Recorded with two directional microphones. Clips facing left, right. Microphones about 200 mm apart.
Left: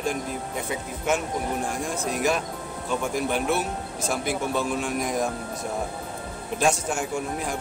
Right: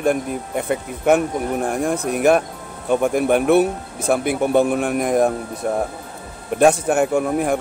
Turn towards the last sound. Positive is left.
turn(degrees=-60)  # may be behind; listen again after turning